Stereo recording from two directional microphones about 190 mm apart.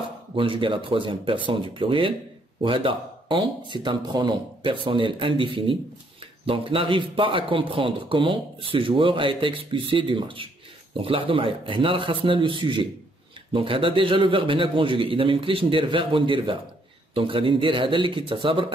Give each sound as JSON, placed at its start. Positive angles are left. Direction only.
{"t": 0.4, "sound": "a man's voice", "side_deg": -25}